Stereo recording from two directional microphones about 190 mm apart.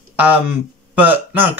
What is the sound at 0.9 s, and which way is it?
Speech, 10° right (ahead or behind).